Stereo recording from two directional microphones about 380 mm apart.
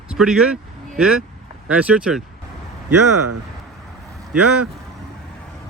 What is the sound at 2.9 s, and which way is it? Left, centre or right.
Speech, right.